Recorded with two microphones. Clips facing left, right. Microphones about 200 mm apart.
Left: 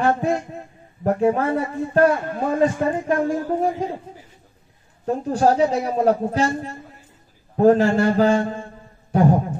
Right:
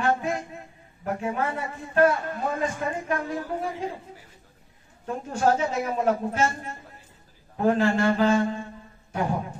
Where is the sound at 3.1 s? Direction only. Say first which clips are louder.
Left 8 dB; 40° left (ahead or behind).